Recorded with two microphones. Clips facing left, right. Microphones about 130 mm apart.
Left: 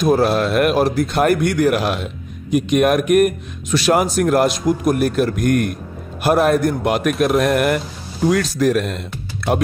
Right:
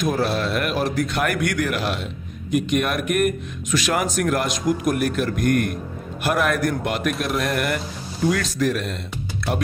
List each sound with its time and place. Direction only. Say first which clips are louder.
0.0 s a man's voice: left 7 dB; 35° left (ahead or behind)
0.3 s speech: left 7 dB; 50° left (ahead or behind)
0.8 s a man's voice: left 6 dB; 35° left (ahead or behind)
1.7 s a man's voice: left 7 dB; 50° left (ahead or behind)
6.2 s a man's voice: left 6 dB; 30° left (ahead or behind)
6.8 s speech: left 7 dB; 50° left (ahead or behind)
8.3 s a man's voice: left 5 dB; 40° left (ahead or behind)